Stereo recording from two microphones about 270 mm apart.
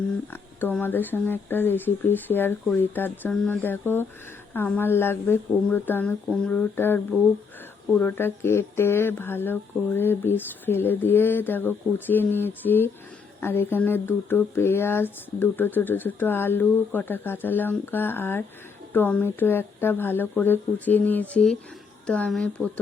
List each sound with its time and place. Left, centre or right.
0.6 s speech: centre